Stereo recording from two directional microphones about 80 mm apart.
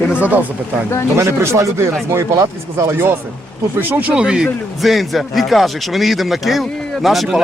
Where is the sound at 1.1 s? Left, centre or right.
Right; by 4.2 s centre.